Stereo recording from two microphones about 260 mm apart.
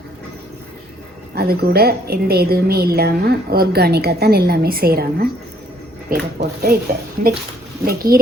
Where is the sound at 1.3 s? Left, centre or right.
Right.